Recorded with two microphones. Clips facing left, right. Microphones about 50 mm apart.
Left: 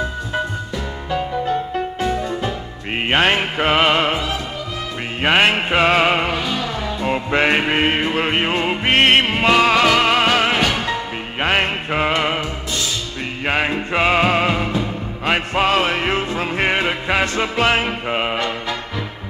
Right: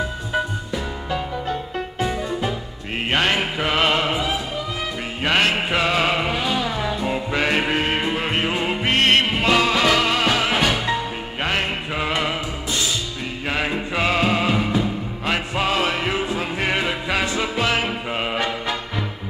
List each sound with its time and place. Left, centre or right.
2.9 s music: left
5.2 s music: left
13.4 s music: left
16.6 s music: left
17.2 s music: left